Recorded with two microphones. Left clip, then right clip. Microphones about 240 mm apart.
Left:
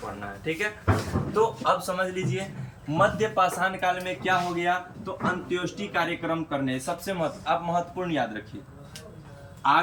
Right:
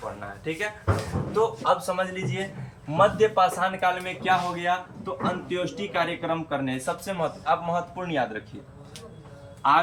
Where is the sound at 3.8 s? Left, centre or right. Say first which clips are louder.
Right 1 dB; centre.